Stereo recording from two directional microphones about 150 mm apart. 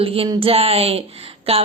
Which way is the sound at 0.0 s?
40° right (ahead or behind).